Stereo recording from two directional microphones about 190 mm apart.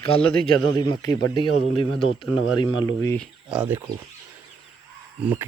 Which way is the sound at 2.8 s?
15° left (ahead or behind).